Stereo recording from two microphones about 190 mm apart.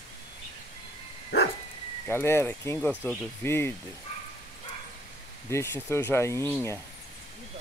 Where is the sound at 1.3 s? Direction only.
60° left (ahead or behind).